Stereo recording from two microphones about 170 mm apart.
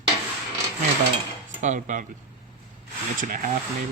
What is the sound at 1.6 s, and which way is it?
Speech, 45° right (ahead or behind).